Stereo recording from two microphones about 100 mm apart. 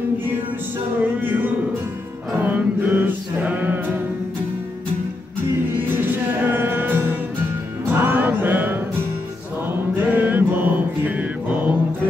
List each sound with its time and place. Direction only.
1.2 s music: 20° right (ahead or behind)
5.8 s music: 20° right (ahead or behind)
9.9 s mantra: 20° right (ahead or behind)